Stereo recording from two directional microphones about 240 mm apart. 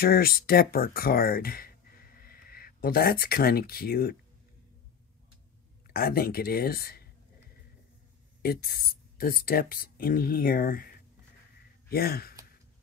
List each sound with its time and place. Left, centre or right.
0.0 s speech: left
5.9 s speech: left
8.4 s speech: left
11.9 s speech: left